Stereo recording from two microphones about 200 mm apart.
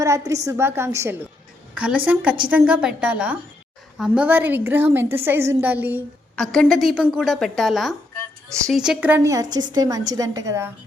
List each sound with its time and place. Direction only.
0.0 s a woman's voice: 15° right (ahead or behind)
6.3 s a woman's voice: 5° left (ahead or behind); by 10.7 s 15° right (ahead or behind)